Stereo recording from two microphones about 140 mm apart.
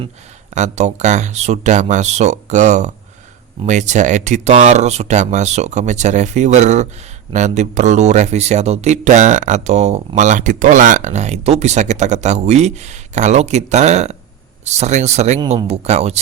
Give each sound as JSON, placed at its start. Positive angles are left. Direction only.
{"t": 0.5, "sound": "speech", "side_deg": -55}
{"t": 10.2, "sound": "speech", "side_deg": -60}